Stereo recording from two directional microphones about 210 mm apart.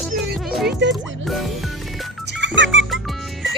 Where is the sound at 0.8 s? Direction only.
55° right (ahead or behind).